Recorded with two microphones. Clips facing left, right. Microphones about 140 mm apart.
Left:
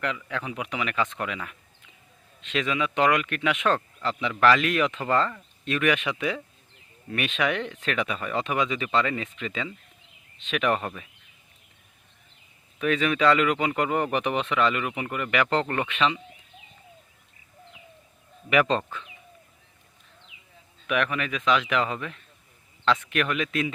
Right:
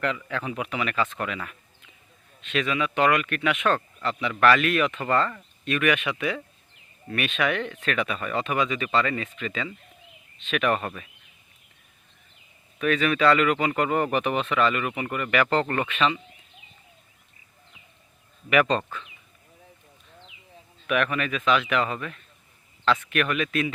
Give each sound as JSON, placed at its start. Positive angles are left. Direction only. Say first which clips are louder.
{"t": 0.3, "sound": "speech", "louder": "right 2 dB", "side_deg": 15}
{"t": 12.8, "sound": "speech", "louder": "right 1 dB", "side_deg": 20}
{"t": 18.5, "sound": "speech", "louder": "right 1 dB", "side_deg": 20}
{"t": 18.8, "sound": "speech", "louder": "even", "side_deg": 5}
{"t": 20.8, "sound": "speech", "louder": "right 1 dB", "side_deg": 15}